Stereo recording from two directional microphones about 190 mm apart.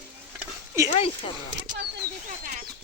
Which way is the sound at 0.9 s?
30° left (ahead or behind).